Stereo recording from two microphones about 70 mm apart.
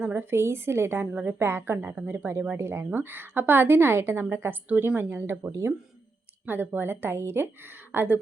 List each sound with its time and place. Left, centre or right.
0.0 s a woman's voice: right
1.4 s a woman's voice: right